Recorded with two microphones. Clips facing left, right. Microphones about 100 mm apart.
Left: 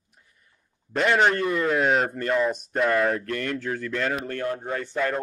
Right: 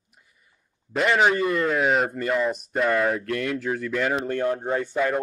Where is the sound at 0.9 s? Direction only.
Centre (ahead or behind).